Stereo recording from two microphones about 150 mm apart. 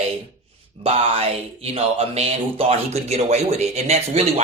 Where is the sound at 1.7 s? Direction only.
40° right (ahead or behind).